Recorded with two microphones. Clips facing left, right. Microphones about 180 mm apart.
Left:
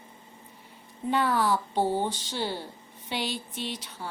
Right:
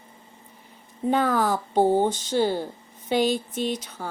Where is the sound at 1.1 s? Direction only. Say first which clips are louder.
Right 3 dB; 45° right (ahead or behind).